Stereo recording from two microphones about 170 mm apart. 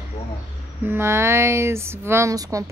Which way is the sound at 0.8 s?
15° right (ahead or behind).